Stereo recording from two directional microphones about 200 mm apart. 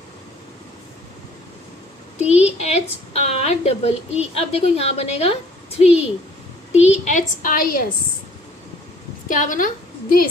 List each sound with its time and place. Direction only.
2.1 s a woman's voice: 35° left (ahead or behind)
9.3 s a woman's voice: 40° left (ahead or behind)